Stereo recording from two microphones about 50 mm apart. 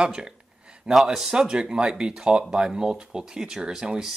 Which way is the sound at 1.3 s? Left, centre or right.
Centre.